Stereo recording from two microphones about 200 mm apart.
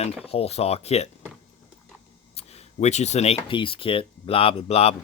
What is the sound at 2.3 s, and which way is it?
Speech, 30° left (ahead or behind).